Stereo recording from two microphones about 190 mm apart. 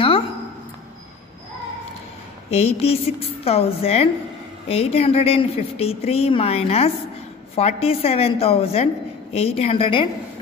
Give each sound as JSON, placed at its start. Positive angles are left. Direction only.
{"t": 2.5, "sound": "a woman's voice", "side_deg": 30}